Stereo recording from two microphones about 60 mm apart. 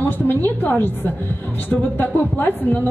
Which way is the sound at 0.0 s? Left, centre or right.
Left.